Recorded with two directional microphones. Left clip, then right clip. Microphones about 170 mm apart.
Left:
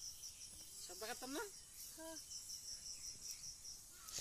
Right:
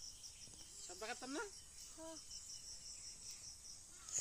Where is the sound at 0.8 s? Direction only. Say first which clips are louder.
Right 1 dB; 10° right (ahead or behind).